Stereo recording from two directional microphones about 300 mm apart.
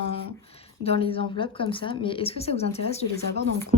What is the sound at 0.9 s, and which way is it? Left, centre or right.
Speech, centre.